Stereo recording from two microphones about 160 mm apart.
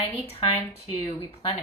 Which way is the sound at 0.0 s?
40° left (ahead or behind).